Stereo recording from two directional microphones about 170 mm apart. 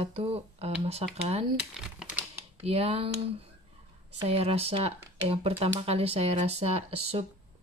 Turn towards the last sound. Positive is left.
turn(degrees=-35)  # may be behind; listen again after turning